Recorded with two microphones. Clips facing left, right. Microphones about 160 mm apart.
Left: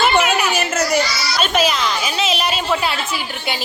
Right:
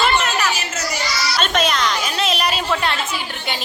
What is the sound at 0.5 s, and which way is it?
Children playing, 55° left (ahead or behind).